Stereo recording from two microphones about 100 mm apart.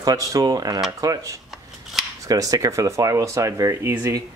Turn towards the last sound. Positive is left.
turn(degrees=-30)  # may be behind; listen again after turning